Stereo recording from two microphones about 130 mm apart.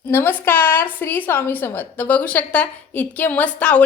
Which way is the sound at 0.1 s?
15° left (ahead or behind).